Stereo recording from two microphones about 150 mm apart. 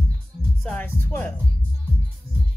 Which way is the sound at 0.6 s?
10° left (ahead or behind).